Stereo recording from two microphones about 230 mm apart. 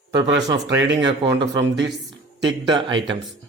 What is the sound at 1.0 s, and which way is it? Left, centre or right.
Speech, centre.